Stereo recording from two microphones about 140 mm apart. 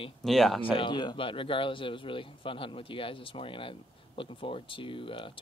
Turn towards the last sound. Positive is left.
turn(degrees=40)  # may be behind; listen again after turning